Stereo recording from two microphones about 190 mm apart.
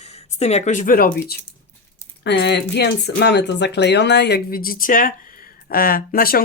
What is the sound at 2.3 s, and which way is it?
Speech, 65° left (ahead or behind).